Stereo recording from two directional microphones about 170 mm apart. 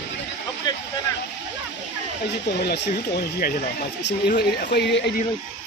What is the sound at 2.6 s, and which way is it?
Speech, 75° left (ahead or behind).